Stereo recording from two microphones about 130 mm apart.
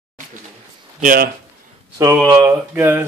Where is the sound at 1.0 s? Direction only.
90° right.